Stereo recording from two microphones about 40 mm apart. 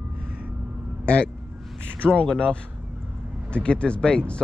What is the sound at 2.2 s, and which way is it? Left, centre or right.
Speech, left.